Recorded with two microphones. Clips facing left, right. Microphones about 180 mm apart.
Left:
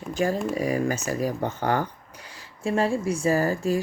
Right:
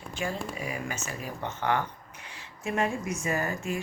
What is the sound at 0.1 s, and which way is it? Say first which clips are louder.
Speech: left 9 dB; 40° left (ahead or behind).